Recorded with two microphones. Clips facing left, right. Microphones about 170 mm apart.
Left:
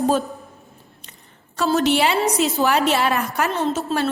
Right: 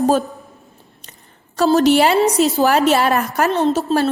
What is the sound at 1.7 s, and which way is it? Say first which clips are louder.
A woman's voice: right 5 dB; 40° right (ahead or behind).